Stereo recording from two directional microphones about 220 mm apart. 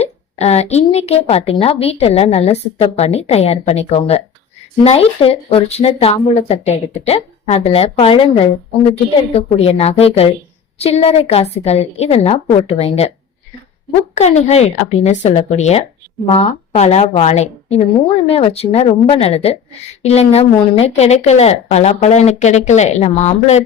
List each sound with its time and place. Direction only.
0.0 s a woman's voice: 30° left (ahead or behind)
14.2 s a woman's voice: 30° left (ahead or behind)